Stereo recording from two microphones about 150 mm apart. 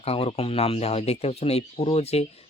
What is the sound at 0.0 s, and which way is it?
Speech, 40° left (ahead or behind).